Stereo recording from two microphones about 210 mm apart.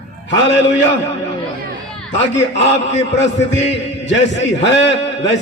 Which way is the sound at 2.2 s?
55° left (ahead or behind).